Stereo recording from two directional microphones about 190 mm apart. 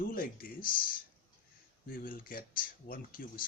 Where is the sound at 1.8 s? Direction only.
50° left (ahead or behind).